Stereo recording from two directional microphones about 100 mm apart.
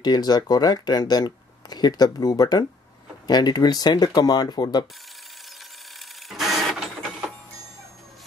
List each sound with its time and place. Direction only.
0.0 s speech: 45° left (ahead or behind)
5.9 s printer: centre (ahead or behind)